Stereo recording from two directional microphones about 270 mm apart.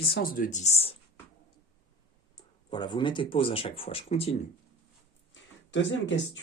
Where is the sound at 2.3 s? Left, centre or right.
Centre.